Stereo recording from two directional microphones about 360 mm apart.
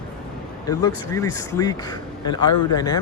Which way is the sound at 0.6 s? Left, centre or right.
Centre.